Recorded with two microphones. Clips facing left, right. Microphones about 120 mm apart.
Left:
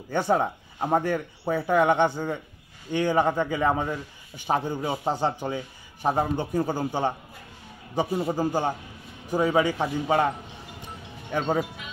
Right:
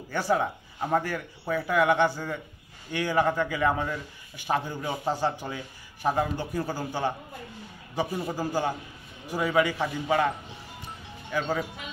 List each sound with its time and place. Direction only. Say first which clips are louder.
0.1 s speech: left 3 dB; 20° left (ahead or behind)
11.3 s speech: left 3 dB; 25° left (ahead or behind)